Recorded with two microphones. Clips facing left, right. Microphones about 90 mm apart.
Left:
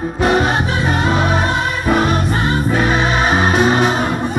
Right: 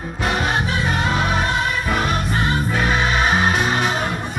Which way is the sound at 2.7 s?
20° left (ahead or behind).